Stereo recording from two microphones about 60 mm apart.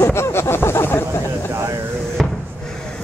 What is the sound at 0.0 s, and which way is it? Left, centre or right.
Vehicle, left.